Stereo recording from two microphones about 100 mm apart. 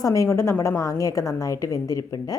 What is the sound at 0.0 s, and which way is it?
A woman's voice, 35° left (ahead or behind).